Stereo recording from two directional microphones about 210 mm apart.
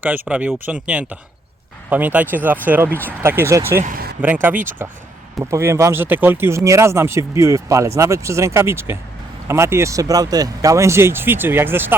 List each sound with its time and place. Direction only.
0.3 s speech: 5° right (ahead or behind)
3.8 s a sound: 45° right (ahead or behind)
4.2 s speech: 10° right (ahead or behind)